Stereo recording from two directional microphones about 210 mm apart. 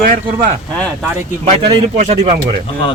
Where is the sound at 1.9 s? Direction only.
30° right (ahead or behind).